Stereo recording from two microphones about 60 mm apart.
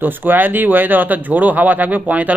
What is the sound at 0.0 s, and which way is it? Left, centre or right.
Speech, right.